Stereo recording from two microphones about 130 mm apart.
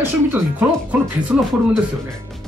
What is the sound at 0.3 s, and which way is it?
Speech, 15° right (ahead or behind).